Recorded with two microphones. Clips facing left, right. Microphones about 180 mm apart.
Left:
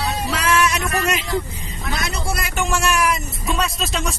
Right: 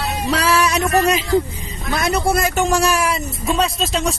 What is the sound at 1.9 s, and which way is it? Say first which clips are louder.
Speech: right 8 dB; 55° right (ahead or behind).